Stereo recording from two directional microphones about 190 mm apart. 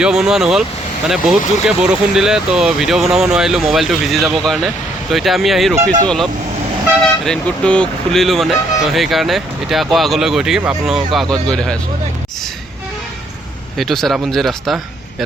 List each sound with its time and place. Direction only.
0.0 s speech: 5° right (ahead or behind)
5.7 s speech: 20° right (ahead or behind)
7.3 s speech: 5° left (ahead or behind)
13.7 s speech: centre (ahead or behind)